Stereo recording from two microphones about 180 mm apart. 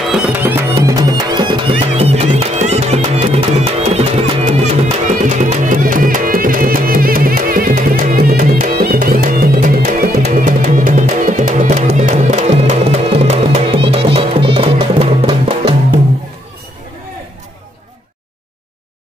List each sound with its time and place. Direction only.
0.1 s music: 10° right (ahead or behind); by 15.7 s 30° right (ahead or behind)